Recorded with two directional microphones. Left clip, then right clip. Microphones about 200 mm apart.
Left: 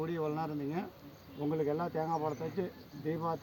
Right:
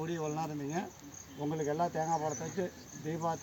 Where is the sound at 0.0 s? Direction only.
10° right (ahead or behind).